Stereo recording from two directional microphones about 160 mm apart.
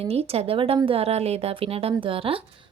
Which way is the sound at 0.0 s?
40° right (ahead or behind).